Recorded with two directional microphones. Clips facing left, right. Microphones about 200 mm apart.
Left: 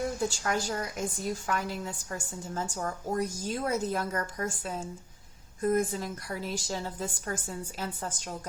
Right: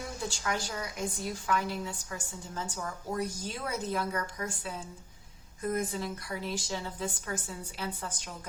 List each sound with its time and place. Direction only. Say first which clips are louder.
0.2 s a woman's voice: left 4 dB; 45° left (ahead or behind)